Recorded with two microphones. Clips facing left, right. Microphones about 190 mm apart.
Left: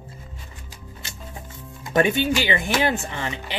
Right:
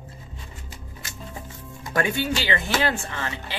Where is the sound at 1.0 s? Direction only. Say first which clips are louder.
Even; 30° left (ahead or behind).